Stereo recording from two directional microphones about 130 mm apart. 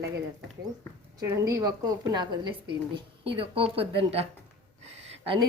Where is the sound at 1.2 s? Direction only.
20° right (ahead or behind); by 4.3 s 50° right (ahead or behind).